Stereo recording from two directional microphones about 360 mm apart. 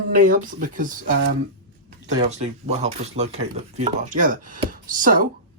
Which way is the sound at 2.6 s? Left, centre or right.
Centre.